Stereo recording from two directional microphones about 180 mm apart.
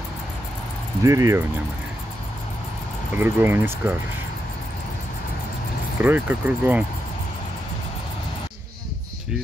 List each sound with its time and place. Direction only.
1.0 s speech: 20° right (ahead or behind)
3.2 s speech: 10° right (ahead or behind)
5.9 s speech: 10° right (ahead or behind)